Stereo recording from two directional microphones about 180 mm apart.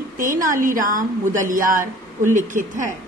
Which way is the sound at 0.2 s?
50° right (ahead or behind).